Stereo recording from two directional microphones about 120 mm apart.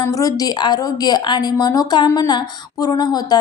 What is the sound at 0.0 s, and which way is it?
Speech, 30° left (ahead or behind).